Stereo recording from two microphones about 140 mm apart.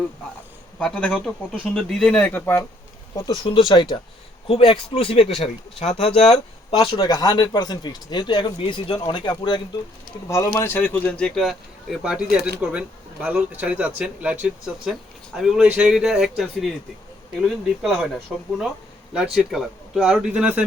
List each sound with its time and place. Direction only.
0.8 s speech: 5° left (ahead or behind)
3.2 s speech: 30° left (ahead or behind); by 6.4 s 50° left (ahead or behind)
6.7 s speech: 30° left (ahead or behind)
10.2 s speech: 20° left (ahead or behind); by 16.7 s centre (ahead or behind)
17.8 s speech: centre (ahead or behind)